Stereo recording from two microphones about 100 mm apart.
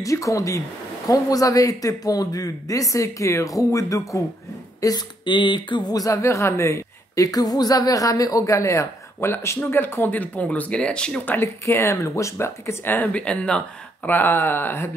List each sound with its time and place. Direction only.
0.0 s speech: 35° left (ahead or behind)
4.8 s speech: 45° left (ahead or behind); by 11.3 s 10° left (ahead or behind)
11.3 s speech: 25° left (ahead or behind)